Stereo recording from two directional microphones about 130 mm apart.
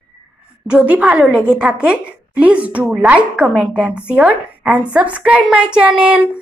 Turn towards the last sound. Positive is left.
turn(degrees=-10)  # may be behind; listen again after turning